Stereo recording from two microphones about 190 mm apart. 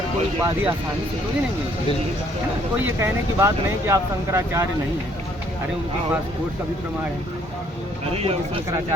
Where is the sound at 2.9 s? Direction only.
15° right (ahead or behind).